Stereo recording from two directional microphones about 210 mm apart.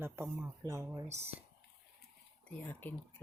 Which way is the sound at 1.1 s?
30° right (ahead or behind).